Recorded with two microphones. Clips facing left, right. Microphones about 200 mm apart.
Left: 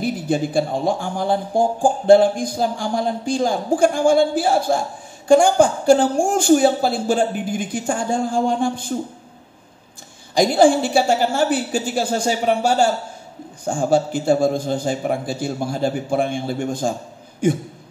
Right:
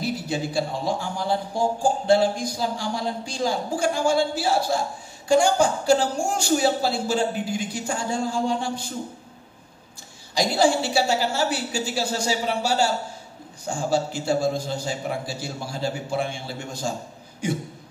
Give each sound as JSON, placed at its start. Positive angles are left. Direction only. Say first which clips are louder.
{"t": 0.0, "sound": "a man's voice", "louder": "left 6 dB", "side_deg": 55}
{"t": 10.3, "sound": "a man's voice", "louder": "left 6 dB", "side_deg": 50}